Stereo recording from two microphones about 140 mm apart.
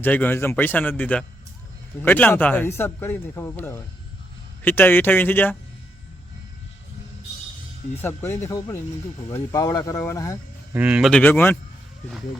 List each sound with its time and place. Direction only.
0.0 s a man's voice: 15° left (ahead or behind)
7.9 s speech: 15° left (ahead or behind)
10.8 s speech: 10° right (ahead or behind)
11.1 s a man's voice: 15° left (ahead or behind)